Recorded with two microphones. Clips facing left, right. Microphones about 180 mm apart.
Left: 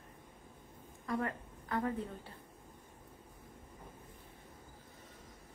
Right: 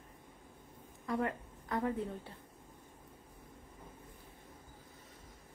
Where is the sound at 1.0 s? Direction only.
25° right (ahead or behind).